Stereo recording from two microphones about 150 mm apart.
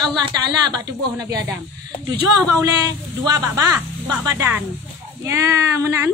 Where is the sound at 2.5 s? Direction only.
25° right (ahead or behind).